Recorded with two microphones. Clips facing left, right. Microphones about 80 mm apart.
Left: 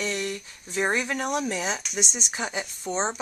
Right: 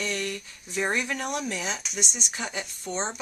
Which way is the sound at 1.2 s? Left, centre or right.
Centre.